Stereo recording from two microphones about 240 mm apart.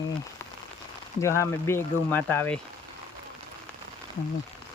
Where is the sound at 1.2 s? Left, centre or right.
Centre.